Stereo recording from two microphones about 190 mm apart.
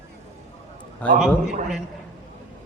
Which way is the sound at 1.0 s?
10° left (ahead or behind).